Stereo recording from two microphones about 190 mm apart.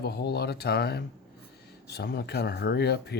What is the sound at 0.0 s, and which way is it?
Speech, 55° left (ahead or behind).